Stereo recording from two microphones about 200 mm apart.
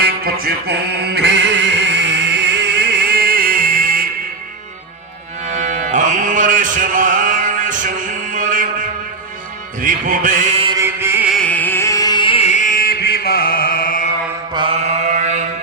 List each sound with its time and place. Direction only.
0.0 s music: 50° right (ahead or behind)
5.5 s music: 40° right (ahead or behind)
9.8 s chant: 40° right (ahead or behind)
10.8 s chant: 10° right (ahead or behind)
11.3 s music: 5° left (ahead or behind); by 14.1 s 45° left (ahead or behind)
14.5 s mantra: 25° right (ahead or behind)